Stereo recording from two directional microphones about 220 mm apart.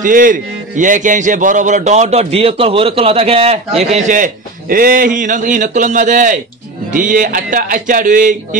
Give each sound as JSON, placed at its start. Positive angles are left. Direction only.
{"t": 0.0, "sound": "a man's voice", "side_deg": -40}